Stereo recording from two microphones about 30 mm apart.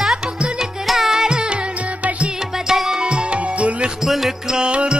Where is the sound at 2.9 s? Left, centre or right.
Right.